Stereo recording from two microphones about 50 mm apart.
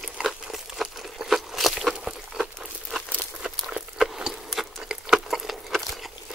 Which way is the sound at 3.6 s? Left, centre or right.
Centre.